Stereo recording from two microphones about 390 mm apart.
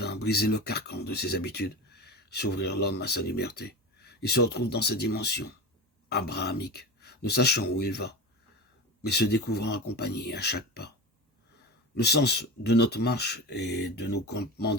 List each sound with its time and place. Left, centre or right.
0.0 s speech: left
11.9 s speech: left